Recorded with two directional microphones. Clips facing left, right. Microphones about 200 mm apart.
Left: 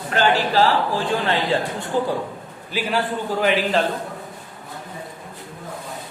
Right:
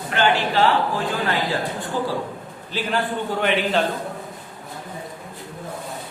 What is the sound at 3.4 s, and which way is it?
Speech, centre (ahead or behind).